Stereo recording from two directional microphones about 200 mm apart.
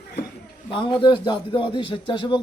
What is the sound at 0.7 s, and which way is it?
A man's voice, 25° left (ahead or behind).